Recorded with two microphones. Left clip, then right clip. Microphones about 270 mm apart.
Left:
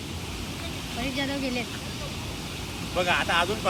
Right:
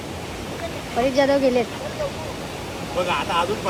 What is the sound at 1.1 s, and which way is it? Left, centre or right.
Speech, right.